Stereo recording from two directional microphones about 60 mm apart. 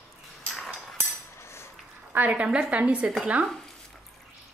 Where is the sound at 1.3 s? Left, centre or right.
Left.